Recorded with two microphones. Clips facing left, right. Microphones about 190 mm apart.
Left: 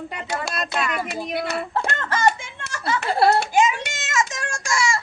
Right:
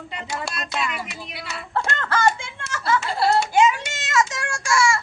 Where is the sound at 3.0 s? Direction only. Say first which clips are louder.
Left 6 dB; 60° left (ahead or behind).